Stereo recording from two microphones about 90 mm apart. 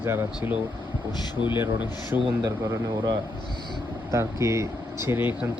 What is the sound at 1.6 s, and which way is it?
Speech, 20° right (ahead or behind).